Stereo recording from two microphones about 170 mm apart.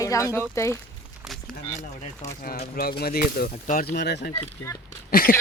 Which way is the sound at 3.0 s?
60° left (ahead or behind).